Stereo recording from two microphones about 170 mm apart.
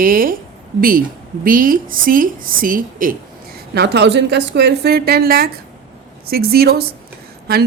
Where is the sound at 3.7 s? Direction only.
75° right (ahead or behind).